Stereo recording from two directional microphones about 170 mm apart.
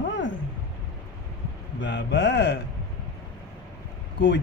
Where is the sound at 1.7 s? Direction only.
90° left.